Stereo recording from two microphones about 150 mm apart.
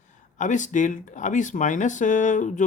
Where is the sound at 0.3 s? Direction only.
55° left (ahead or behind).